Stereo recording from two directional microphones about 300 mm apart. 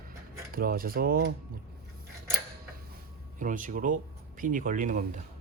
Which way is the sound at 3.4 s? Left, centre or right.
Right.